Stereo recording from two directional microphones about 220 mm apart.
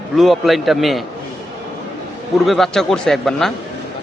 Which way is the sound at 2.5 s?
Centre (ahead or behind).